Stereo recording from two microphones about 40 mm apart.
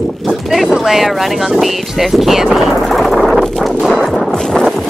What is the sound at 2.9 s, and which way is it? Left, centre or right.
Vehicle, centre.